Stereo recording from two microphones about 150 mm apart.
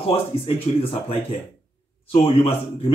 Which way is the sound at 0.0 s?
40° left (ahead or behind).